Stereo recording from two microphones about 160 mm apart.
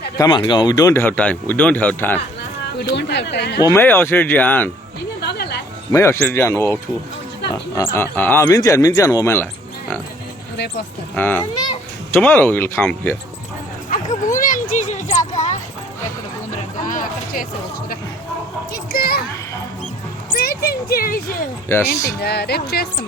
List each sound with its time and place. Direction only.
0.2 s speech: 30° left (ahead or behind); by 2.1 s 10° left (ahead or behind)
2.9 s speech: 90° left
3.6 s speech: 15° left (ahead or behind)
5.2 s music: 90° left
5.9 s speech: 15° left (ahead or behind)
11.1 s speech: 10° left (ahead or behind)
13.9 s a sound: 55° left (ahead or behind)
16.8 s music: 55° left (ahead or behind)
18.7 s a child's voice: 70° left (ahead or behind)
20.3 s speech: 70° left (ahead or behind)
21.7 s speech: 15° left (ahead or behind)
22.2 s speech: 90° left